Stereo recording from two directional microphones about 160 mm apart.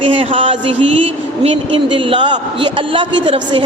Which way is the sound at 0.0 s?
35° right (ahead or behind).